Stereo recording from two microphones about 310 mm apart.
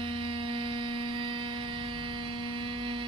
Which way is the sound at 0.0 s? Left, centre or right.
Centre.